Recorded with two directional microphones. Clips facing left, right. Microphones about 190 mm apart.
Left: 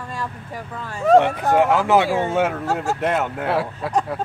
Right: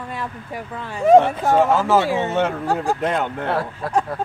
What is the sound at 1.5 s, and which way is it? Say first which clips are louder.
Speech: even; 15° left (ahead or behind).